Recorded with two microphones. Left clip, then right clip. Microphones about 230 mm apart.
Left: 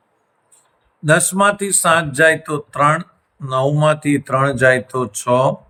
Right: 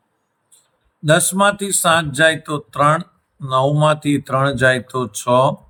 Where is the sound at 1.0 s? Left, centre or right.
Centre.